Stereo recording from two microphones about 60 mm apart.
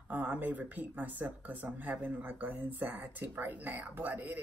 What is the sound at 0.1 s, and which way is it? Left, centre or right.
Speech, right.